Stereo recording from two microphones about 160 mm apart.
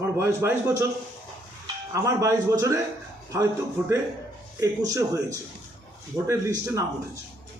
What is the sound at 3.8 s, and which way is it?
Speech, 10° right (ahead or behind).